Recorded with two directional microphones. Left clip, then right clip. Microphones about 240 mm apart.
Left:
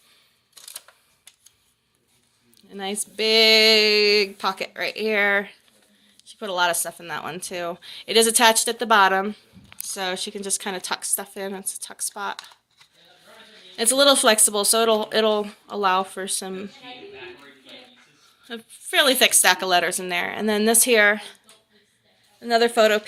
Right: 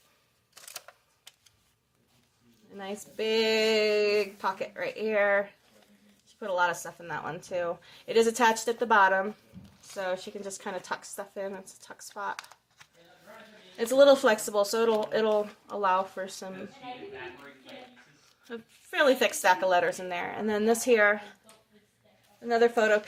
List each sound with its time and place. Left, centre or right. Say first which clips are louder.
2.7 s speech: left 8 dB; left
13.7 s speech: left 2 dB; left
18.4 s speech: left 6 dB; left
22.4 s speech: left 6 dB; left